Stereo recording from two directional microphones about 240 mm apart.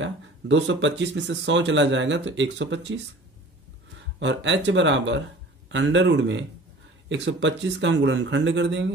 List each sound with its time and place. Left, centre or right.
0.0 s speech: right
4.2 s speech: right